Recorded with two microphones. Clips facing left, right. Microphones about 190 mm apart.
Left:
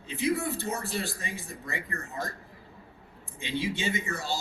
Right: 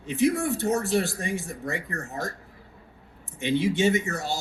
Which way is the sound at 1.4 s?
80° right.